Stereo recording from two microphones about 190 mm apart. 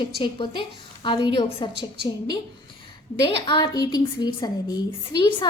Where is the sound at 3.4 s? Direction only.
25° left (ahead or behind).